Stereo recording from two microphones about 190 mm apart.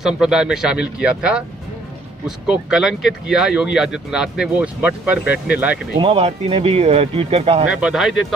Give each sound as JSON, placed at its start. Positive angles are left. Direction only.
{"t": 0.0, "sound": "speech", "side_deg": -5}
{"t": 5.9, "sound": "speech", "side_deg": -30}
{"t": 7.7, "sound": "speech", "side_deg": -5}